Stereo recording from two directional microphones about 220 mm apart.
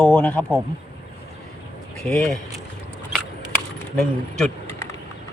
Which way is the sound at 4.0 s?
Centre (ahead or behind).